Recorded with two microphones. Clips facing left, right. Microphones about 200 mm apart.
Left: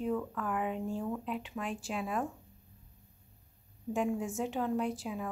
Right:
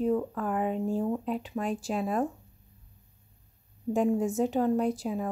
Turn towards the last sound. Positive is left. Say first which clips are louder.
# right 6 dB
turn(degrees=-40)  # may be behind; listen again after turning